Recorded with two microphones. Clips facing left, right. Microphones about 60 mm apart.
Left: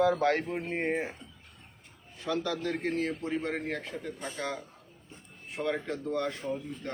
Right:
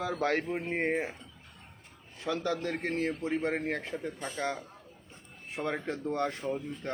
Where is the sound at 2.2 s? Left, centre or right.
Right.